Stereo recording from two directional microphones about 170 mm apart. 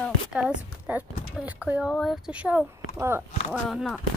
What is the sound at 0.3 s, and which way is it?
Speech, 5° right (ahead or behind).